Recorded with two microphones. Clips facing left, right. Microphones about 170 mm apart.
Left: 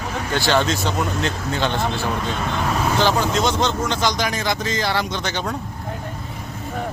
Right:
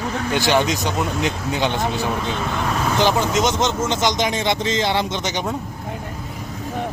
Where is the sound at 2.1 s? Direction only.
5° right (ahead or behind).